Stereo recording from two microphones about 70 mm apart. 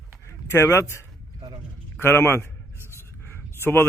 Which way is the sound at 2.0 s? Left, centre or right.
Left.